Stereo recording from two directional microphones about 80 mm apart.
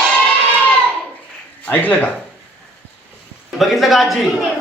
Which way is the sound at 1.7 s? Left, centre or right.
Left.